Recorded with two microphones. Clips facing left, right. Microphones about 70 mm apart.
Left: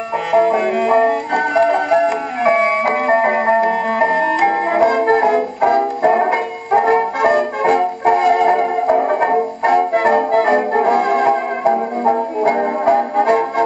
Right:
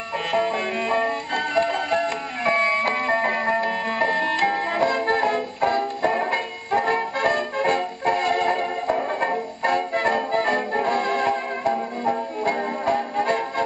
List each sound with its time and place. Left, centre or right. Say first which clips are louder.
0.3 s music: left 10 dB; centre
9.2 s music: left 8 dB; centre
11.7 s music: left 8 dB; left